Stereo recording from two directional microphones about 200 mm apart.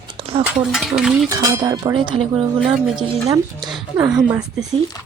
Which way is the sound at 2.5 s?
Centre (ahead or behind).